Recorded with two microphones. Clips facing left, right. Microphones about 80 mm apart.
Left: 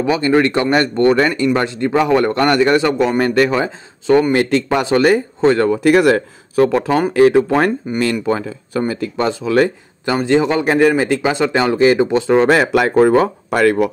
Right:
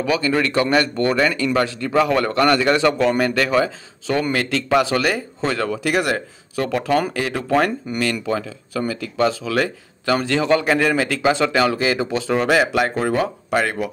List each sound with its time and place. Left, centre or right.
0.0 s speech: left
3.2 s speech: left
5.9 s speech: left
6.5 s speech: left
10.0 s speech: left
11.6 s speech: left
12.4 s speech: left